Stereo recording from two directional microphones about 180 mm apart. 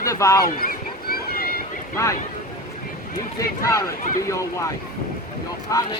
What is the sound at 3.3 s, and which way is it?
Speech, 20° left (ahead or behind).